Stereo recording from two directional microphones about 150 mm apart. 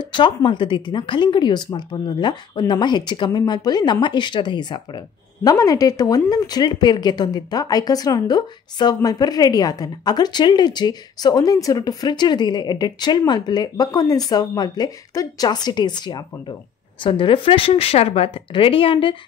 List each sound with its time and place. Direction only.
0.0 s speech: 30° left (ahead or behind)